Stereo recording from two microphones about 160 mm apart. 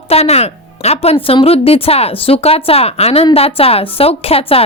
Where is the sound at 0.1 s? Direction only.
40° left (ahead or behind).